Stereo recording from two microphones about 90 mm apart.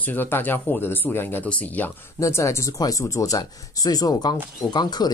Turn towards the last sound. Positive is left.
turn(degrees=50)  # may be behind; listen again after turning